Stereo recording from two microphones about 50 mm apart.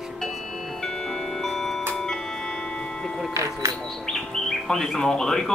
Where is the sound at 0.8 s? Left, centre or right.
Centre.